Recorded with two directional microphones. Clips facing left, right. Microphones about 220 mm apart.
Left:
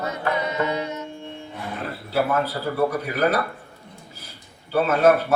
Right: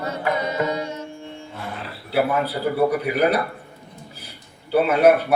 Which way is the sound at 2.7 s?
15° right (ahead or behind).